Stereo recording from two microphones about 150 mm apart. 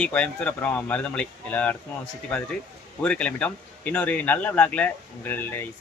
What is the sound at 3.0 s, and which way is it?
Speech, 5° left (ahead or behind).